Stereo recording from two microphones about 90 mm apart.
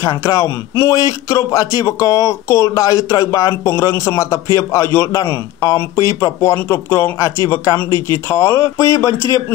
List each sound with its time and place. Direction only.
0.0 s speech: 30° left (ahead or behind)